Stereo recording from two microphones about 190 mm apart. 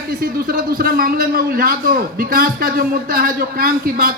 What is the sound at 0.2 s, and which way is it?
A man's voice, 50° right (ahead or behind).